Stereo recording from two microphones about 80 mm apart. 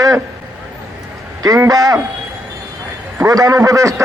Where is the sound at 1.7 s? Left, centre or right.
Right.